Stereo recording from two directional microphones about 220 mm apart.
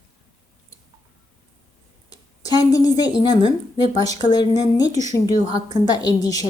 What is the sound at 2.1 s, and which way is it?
Speech, 15° left (ahead or behind).